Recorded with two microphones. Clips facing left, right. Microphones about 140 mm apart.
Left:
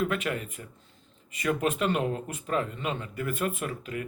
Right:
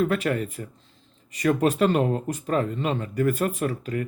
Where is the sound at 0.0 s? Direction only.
40° right (ahead or behind).